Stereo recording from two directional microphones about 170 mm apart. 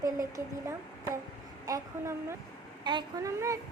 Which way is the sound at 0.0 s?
20° right (ahead or behind).